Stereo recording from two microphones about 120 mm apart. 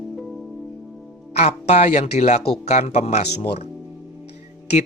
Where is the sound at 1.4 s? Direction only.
70° left (ahead or behind).